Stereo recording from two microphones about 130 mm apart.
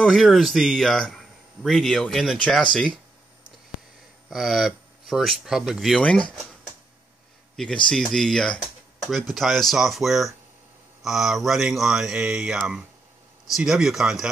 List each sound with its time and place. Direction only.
0.0 s a man's voice: centre (ahead or behind)
4.3 s a man's voice: centre (ahead or behind)
7.5 s a man's voice: 5° left (ahead or behind)